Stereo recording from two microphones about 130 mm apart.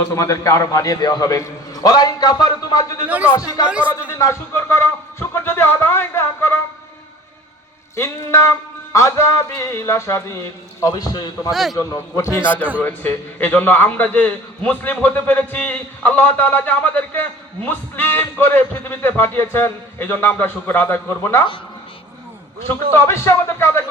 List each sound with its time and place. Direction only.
0.1 s a man's voice: 25° left (ahead or behind)
3.1 s speech: 10° right (ahead or behind)
3.3 s a man's voice: 25° left (ahead or behind)
5.3 s music: 20° left (ahead or behind)
7.9 s a man's voice: 20° left (ahead or behind)
11.5 s a man's voice: centre (ahead or behind)
11.8 s a man's voice: 25° left (ahead or behind)
23.0 s a man's voice: 20° left (ahead or behind)